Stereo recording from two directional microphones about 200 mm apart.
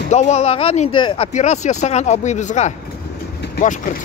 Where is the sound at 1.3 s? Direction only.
35° left (ahead or behind).